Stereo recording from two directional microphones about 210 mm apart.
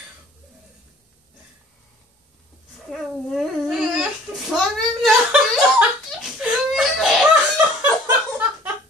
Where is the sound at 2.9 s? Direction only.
Centre (ahead or behind).